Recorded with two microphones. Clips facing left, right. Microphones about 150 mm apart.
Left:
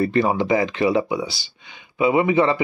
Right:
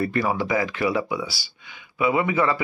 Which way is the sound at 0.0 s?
25° left (ahead or behind).